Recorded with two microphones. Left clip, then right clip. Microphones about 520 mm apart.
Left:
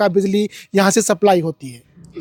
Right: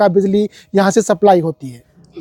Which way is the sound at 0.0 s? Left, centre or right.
Centre.